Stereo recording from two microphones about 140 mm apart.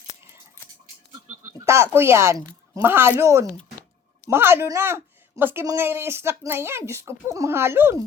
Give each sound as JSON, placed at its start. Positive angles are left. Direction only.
{"t": 1.3, "sound": "a woman's voice", "side_deg": -20}